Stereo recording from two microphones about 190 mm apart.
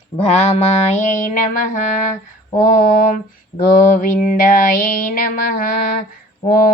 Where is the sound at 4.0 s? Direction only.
45° left (ahead or behind).